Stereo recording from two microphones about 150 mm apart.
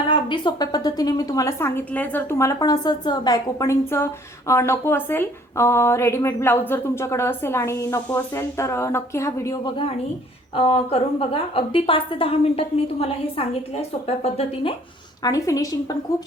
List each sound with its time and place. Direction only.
0.1 s a woman's voice: 30° left (ahead or behind)
15.2 s a woman's voice: 25° left (ahead or behind)